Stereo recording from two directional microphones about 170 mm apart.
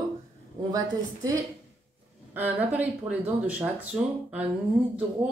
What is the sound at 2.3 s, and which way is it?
Speech, 10° right (ahead or behind).